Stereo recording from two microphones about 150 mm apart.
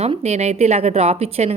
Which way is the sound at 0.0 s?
45° right (ahead or behind).